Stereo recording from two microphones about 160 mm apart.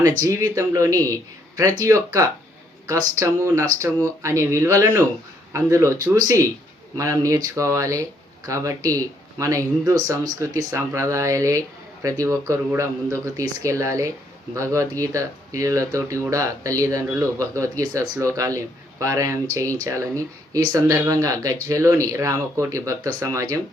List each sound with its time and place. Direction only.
0.2 s speech: 20° right (ahead or behind)